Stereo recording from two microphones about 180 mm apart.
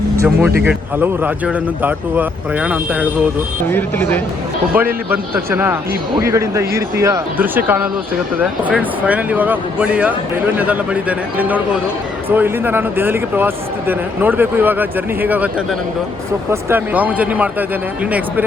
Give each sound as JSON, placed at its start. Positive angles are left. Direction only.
{"t": 0.2, "sound": "speech", "side_deg": -5}
{"t": 3.7, "sound": "speech", "side_deg": 10}
{"t": 4.7, "sound": "speech", "side_deg": -10}
{"t": 11.3, "sound": "speech", "side_deg": -10}
{"t": 16.5, "sound": "speech", "side_deg": -10}